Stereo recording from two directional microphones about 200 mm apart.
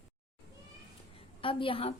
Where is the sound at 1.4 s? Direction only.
25° left (ahead or behind).